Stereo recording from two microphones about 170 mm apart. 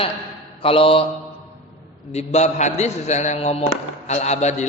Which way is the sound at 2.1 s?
40° left (ahead or behind).